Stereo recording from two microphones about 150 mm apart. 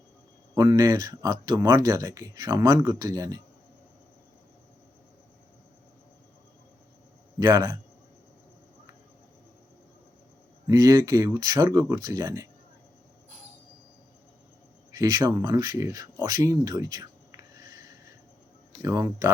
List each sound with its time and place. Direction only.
0.5 s speech: 25° right (ahead or behind)
7.3 s speech: 25° right (ahead or behind)
10.7 s speech: 25° right (ahead or behind)
14.9 s speech: 25° right (ahead or behind)